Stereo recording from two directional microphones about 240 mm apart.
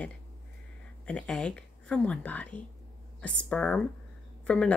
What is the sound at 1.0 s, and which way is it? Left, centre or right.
A woman's voice, centre.